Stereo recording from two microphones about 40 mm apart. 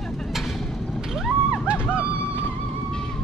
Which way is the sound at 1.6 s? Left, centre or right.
Right.